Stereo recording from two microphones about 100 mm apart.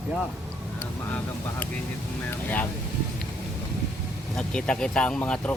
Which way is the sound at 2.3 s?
20° left (ahead or behind).